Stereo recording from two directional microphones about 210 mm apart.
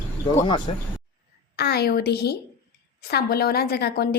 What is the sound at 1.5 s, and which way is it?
A woman's voice, 50° left (ahead or behind).